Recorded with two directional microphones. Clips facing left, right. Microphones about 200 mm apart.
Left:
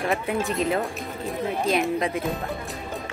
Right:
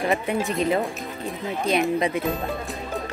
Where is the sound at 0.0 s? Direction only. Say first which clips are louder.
Right 2 dB; centre (ahead or behind).